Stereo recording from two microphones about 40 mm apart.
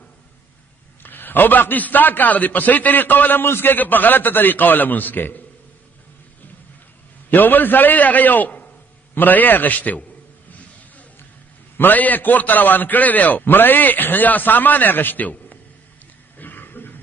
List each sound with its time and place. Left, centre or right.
1.0 s a man's voice: left
3.4 s a man's voice: left
3.7 s a man's voice: left
7.2 s a man's voice: left
11.7 s a man's voice: left
16.3 s a sound: left